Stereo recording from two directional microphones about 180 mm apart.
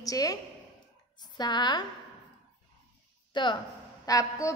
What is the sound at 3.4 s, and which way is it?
A woman's voice, 25° left (ahead or behind).